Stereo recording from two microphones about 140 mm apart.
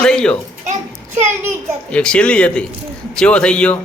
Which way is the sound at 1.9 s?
10° left (ahead or behind).